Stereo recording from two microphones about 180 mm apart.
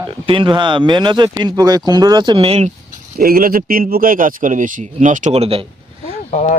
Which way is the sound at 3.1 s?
55° right (ahead or behind).